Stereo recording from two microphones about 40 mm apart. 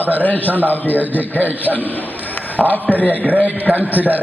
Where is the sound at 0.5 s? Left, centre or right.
Right.